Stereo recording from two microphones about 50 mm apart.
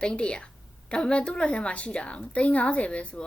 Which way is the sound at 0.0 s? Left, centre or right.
Centre.